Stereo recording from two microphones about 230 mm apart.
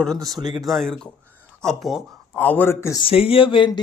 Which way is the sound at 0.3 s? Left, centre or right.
Centre.